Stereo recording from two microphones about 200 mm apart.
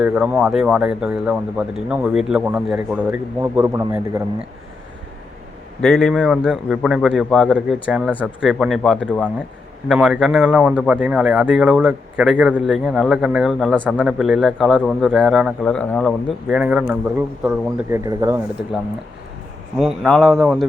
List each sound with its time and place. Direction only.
0.0 s speech: 5° right (ahead or behind)
5.8 s speech: centre (ahead or behind); by 18.3 s 15° right (ahead or behind)
19.8 s speech: centre (ahead or behind)